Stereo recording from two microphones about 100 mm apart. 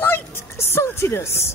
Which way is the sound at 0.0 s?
20° left (ahead or behind).